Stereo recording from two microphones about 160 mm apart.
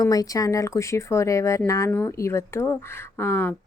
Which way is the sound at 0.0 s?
20° left (ahead or behind).